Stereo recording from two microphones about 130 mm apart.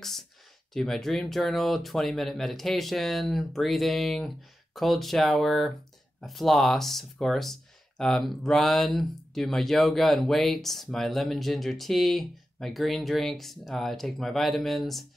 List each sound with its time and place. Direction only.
0.7 s speech: 5° left (ahead or behind)